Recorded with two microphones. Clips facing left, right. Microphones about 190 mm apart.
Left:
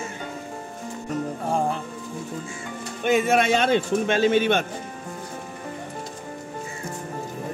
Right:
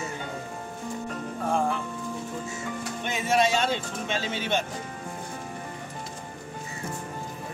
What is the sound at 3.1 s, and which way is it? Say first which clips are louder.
Speech: left 5 dB; 55° left (ahead or behind).